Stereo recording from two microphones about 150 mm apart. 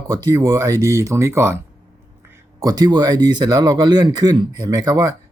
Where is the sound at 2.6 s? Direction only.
25° right (ahead or behind).